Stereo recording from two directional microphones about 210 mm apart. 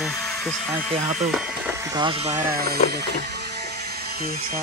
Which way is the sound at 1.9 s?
25° right (ahead or behind).